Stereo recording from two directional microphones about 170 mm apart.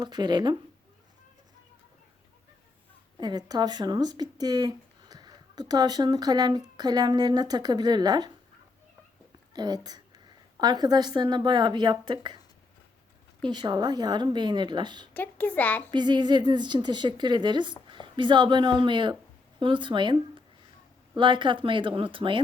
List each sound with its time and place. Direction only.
0.0 s speech: 25° right (ahead or behind)
3.2 s speech: 25° right (ahead or behind)
9.5 s a woman's voice: 25° right (ahead or behind)
13.4 s speech: 25° right (ahead or behind)
15.1 s a woman's voice: 10° left (ahead or behind)
15.9 s speech: 25° right (ahead or behind)